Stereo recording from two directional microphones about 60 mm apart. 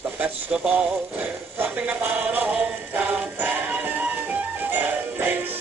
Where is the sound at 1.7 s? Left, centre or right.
Right.